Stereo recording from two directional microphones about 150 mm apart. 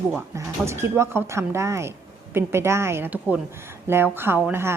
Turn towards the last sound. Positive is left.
turn(degrees=-10)  # may be behind; listen again after turning